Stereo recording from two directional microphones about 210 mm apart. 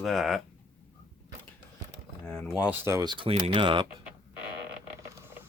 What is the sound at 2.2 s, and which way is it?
Speech, 5° left (ahead or behind).